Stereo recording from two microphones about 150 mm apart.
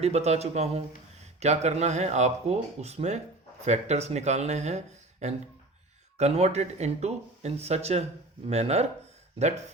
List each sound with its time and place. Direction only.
0.0 s speech: 45° right (ahead or behind)